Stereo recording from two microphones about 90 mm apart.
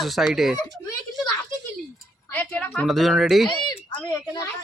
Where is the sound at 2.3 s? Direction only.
15° left (ahead or behind).